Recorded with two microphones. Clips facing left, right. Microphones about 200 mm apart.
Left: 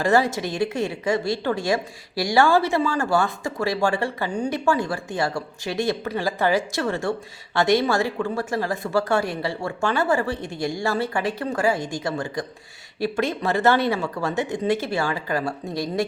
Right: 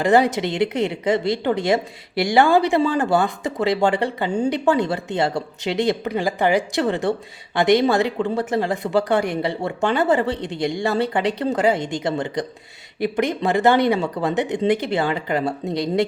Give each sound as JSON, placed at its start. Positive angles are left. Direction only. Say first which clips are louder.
{"t": 0.0, "sound": "speech", "louder": "right 3 dB", "side_deg": -20}